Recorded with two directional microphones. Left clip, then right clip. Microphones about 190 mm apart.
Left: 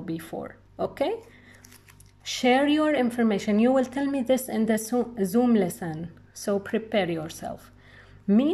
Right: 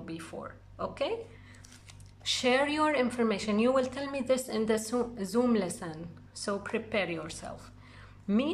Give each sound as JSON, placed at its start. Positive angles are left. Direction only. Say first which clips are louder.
{"t": 0.0, "sound": "speech", "louder": "left 7 dB", "side_deg": 20}
{"t": 2.2, "sound": "speech", "louder": "left 5 dB", "side_deg": 15}